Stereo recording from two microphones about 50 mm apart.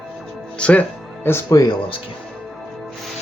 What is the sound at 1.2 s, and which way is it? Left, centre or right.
Speech, left.